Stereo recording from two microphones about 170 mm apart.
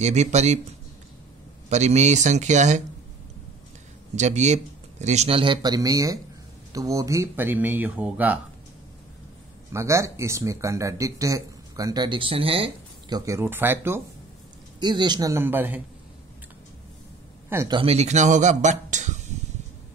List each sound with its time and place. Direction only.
0.0 s speech: 40° right (ahead or behind)
1.7 s speech: 40° right (ahead or behind)
4.1 s speech: 45° right (ahead or behind); by 8.4 s 10° right (ahead or behind)
9.7 s speech: 15° right (ahead or behind)
13.2 s speech: 15° right (ahead or behind)
14.8 s speech: 25° right (ahead or behind)
17.6 s speech: 30° right (ahead or behind)